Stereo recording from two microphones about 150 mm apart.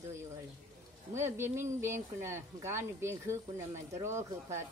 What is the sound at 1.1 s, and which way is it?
Speech, 15° right (ahead or behind).